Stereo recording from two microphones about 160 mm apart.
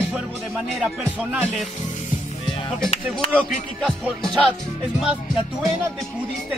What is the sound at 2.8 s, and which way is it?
Speech, 40° left (ahead or behind).